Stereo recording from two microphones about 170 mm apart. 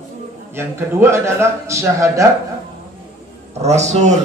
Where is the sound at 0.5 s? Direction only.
15° right (ahead or behind).